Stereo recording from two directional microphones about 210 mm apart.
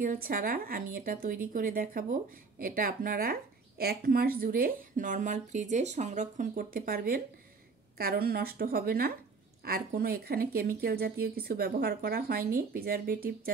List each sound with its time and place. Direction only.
0.0 s speech: 40° right (ahead or behind)